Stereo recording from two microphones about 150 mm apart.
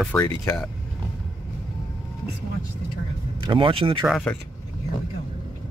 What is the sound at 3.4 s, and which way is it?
Speech, 35° right (ahead or behind).